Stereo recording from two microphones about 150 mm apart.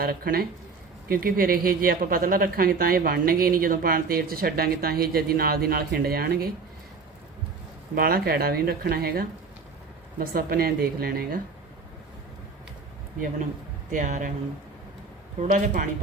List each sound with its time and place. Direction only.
0.0 s speech: 85° right
1.0 s speech: 75° right (ahead or behind); by 6.5 s 90° right
7.9 s speech: 85° right
10.2 s speech: 75° right (ahead or behind)
13.9 s speech: 60° right (ahead or behind)
15.4 s speech: 55° right (ahead or behind)